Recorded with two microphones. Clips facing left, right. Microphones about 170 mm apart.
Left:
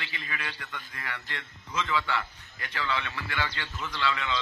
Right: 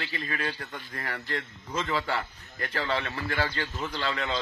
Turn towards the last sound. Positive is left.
turn(degrees=-40)  # may be behind; listen again after turning